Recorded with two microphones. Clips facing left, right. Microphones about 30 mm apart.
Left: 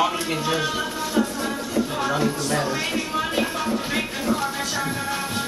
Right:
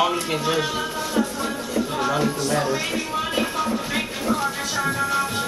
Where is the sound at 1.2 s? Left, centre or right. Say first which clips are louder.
Left 1 dB; centre.